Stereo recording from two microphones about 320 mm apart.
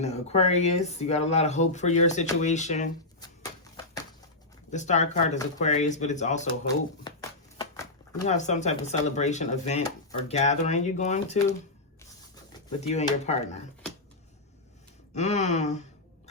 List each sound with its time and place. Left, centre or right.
0.0 s speech: centre
3.6 s a sound: centre
4.7 s speech: left
6.7 s shuffling cards: centre
8.3 s speech: left
12.8 s speech: centre
15.1 s a sound: left